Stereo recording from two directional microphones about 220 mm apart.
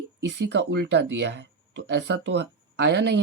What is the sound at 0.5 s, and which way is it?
Speech, 55° right (ahead or behind).